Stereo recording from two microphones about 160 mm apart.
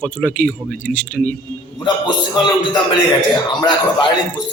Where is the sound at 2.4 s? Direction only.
30° left (ahead or behind).